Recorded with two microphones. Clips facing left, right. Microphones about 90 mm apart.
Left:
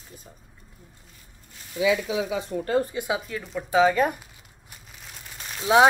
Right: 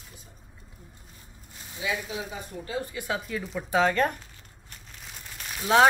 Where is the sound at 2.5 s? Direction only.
50° left (ahead or behind).